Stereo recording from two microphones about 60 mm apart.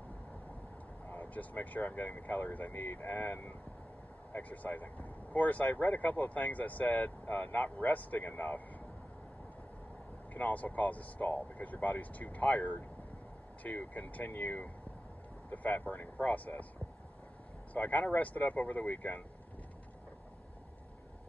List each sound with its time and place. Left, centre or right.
1.0 s speech: left
10.3 s speech: left
17.7 s speech: left